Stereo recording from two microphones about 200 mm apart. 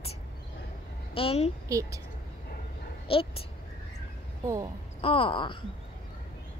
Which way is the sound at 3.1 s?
25° left (ahead or behind).